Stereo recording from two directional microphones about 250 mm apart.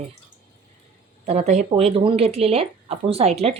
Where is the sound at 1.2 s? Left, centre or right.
Right.